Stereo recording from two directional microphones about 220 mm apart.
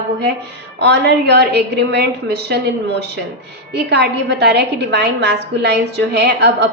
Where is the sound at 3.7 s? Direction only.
50° right (ahead or behind).